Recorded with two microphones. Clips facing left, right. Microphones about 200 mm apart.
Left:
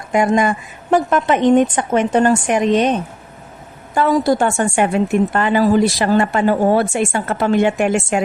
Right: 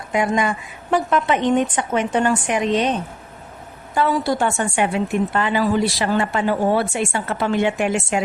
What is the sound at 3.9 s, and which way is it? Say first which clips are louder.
A woman's voice: left 5 dB; 45° left (ahead or behind).